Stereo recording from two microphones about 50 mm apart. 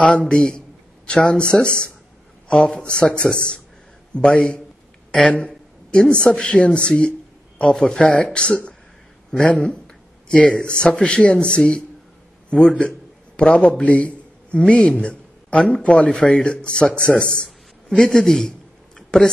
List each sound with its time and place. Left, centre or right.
0.0 s a man's voice: centre
5.9 s speech: centre
7.7 s speech: centre
8.0 s a man's voice: left
18.9 s a sound: centre